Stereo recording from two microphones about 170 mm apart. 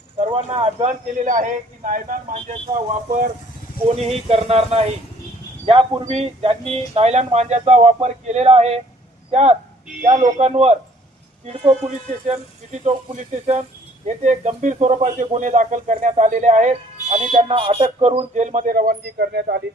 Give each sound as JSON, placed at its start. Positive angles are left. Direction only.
{"t": 0.3, "sound": "speech", "side_deg": -30}
{"t": 3.8, "sound": "speech", "side_deg": -35}
{"t": 14.2, "sound": "speech", "side_deg": -45}
{"t": 18.4, "sound": "a man's voice", "side_deg": -50}